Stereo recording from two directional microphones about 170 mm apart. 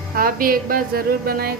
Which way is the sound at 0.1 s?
60° right (ahead or behind).